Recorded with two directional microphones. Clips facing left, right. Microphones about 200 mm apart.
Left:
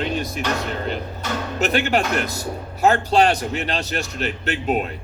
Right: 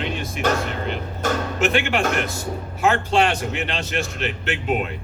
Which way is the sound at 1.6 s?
40° left (ahead or behind).